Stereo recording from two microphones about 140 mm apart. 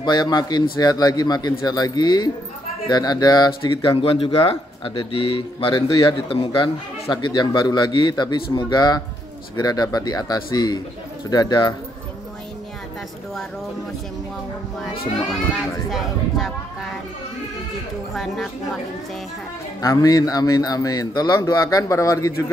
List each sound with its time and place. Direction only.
0.0 s a man's voice: 30° left (ahead or behind)
5.9 s a man's voice: 25° left (ahead or behind)
6.2 s a man's voice: 40° left (ahead or behind)
15.9 s speech: centre (ahead or behind)
18.1 s speech: centre (ahead or behind)
19.8 s a man's voice: 25° left (ahead or behind)